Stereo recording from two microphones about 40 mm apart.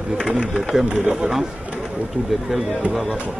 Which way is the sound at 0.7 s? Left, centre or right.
Centre.